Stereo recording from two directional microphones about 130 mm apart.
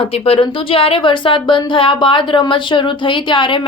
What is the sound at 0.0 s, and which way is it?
Speech, 45° left (ahead or behind).